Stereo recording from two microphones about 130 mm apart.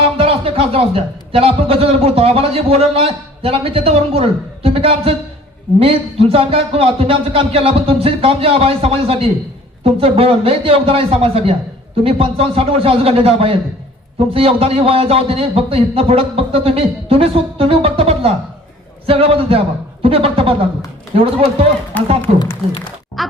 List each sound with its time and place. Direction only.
0.0 s a man's voice: 45° right (ahead or behind)
21.9 s speech: 15° left (ahead or behind)